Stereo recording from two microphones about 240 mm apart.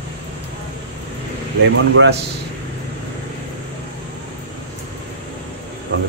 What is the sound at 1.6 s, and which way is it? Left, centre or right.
Speech, right.